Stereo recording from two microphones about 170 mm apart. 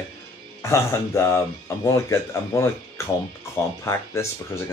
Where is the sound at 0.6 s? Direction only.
15° left (ahead or behind).